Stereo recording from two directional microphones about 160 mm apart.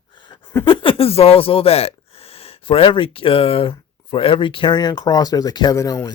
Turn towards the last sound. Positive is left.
turn(degrees=20)  # may be behind; listen again after turning